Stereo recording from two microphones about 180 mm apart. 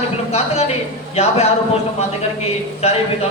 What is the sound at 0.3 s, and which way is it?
Speech, 35° left (ahead or behind).